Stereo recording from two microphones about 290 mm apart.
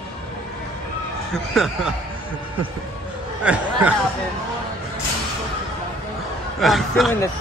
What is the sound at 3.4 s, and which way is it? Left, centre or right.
Speech, centre.